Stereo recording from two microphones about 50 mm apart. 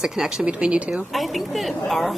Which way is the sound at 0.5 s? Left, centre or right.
Right.